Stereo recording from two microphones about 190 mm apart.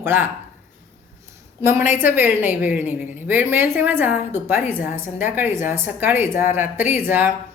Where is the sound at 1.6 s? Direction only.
15° right (ahead or behind).